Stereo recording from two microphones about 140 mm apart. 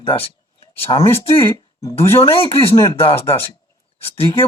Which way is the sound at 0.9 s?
35° left (ahead or behind).